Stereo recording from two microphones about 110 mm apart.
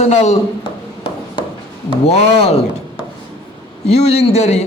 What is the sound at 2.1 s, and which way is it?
Speech, 65° left (ahead or behind).